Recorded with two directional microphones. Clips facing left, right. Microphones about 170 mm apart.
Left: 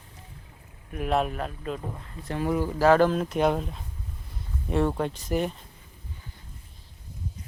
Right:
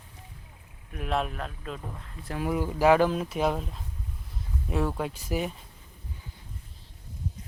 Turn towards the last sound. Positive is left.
turn(degrees=-5)  # may be behind; listen again after turning